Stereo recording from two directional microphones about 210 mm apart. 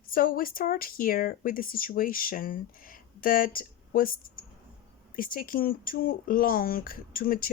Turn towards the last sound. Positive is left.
turn(degrees=45)  # may be behind; listen again after turning